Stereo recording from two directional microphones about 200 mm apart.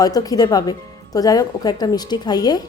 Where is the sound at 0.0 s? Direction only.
20° left (ahead or behind).